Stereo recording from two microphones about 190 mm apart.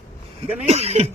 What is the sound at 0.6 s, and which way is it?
Speech, 35° right (ahead or behind).